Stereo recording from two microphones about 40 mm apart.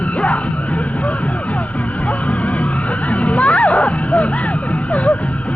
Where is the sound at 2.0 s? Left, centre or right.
Left.